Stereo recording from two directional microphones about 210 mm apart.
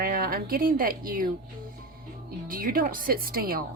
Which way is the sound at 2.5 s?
40° right (ahead or behind).